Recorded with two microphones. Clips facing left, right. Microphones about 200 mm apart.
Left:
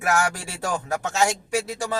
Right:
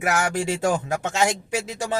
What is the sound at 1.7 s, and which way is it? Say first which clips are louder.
Speech: right 1 dB; 20° right (ahead or behind).